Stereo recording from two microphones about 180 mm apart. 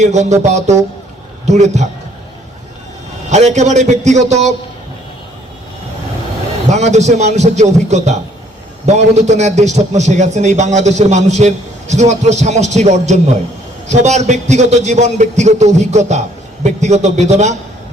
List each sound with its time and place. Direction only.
0.0 s a man's voice: 40° right (ahead or behind)
3.2 s a man's voice: 40° right (ahead or behind)
6.7 s a man's voice: 40° right (ahead or behind)